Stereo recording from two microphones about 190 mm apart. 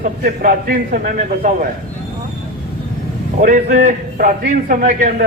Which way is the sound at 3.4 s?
45° right (ahead or behind).